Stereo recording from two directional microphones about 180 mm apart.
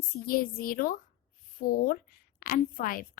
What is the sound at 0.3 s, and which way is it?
A woman's voice, 55° left (ahead or behind).